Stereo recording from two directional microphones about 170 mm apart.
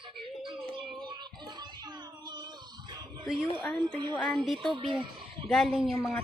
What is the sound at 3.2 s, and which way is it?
Speech, centre (ahead or behind).